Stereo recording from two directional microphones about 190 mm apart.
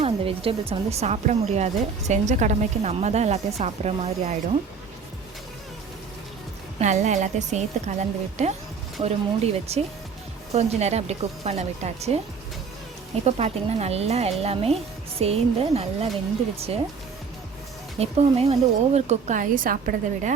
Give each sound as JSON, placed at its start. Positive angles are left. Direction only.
{"t": 0.0, "sound": "speech", "side_deg": -30}
{"t": 6.7, "sound": "speech", "side_deg": -40}
{"t": 13.2, "sound": "speech", "side_deg": -35}
{"t": 18.0, "sound": "a woman's voice", "side_deg": -30}